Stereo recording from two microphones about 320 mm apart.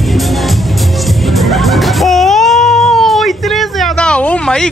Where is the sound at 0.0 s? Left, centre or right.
Centre.